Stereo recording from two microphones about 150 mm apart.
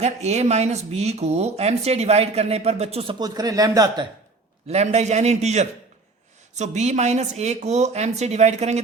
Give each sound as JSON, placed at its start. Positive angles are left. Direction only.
{"t": 0.0, "sound": "speech", "side_deg": -45}
{"t": 3.2, "sound": "speech", "side_deg": -25}
{"t": 4.7, "sound": "speech", "side_deg": -45}